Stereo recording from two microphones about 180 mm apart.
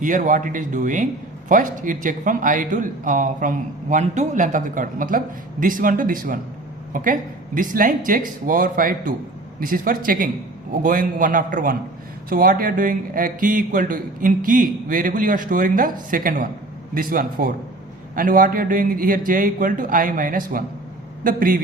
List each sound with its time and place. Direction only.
0.0 s a man's voice: 45° right (ahead or behind)